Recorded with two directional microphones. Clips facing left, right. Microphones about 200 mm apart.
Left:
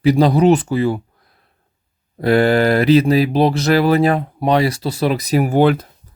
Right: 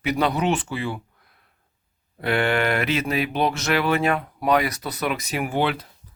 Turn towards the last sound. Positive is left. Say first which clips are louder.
# left 10 dB
turn(degrees=45)  # may be behind; listen again after turning